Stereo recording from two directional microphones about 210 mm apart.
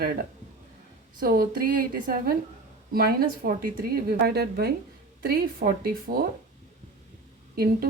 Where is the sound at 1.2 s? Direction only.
45° right (ahead or behind).